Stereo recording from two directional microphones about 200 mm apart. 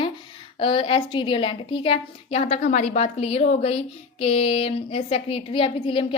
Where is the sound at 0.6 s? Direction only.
25° left (ahead or behind).